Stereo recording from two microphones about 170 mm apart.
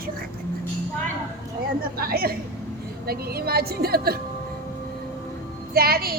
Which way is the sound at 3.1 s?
65° right (ahead or behind).